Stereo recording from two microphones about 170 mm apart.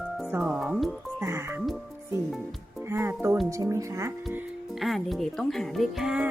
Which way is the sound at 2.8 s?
15° right (ahead or behind).